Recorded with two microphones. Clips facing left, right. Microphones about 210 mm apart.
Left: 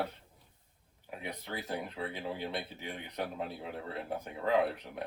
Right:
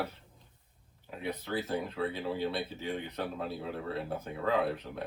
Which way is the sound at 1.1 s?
15° left (ahead or behind).